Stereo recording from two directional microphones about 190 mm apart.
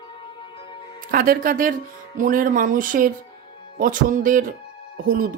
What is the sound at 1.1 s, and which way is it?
Speech, 50° right (ahead or behind).